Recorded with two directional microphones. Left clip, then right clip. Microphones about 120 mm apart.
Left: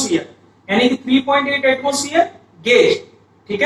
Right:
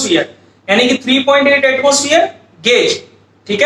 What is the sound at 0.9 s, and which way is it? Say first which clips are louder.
Speech: right 5 dB; 30° right (ahead or behind).